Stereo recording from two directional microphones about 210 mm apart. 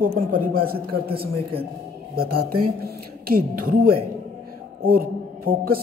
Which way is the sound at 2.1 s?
45° right (ahead or behind).